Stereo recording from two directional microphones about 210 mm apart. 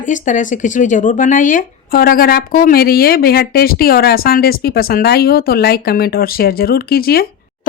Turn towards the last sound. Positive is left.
turn(degrees=45)  # may be behind; listen again after turning